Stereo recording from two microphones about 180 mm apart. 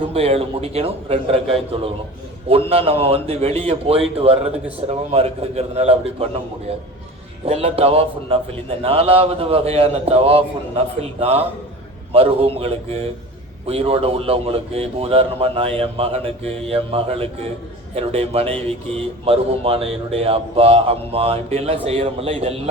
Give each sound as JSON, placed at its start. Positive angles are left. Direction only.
{"t": 0.1, "sound": "speech", "side_deg": -35}
{"t": 7.4, "sound": "speech", "side_deg": -35}